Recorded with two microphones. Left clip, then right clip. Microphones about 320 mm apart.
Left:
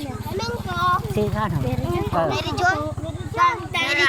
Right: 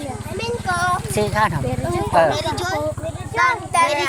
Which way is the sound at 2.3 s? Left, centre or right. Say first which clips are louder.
Left 2 dB; centre.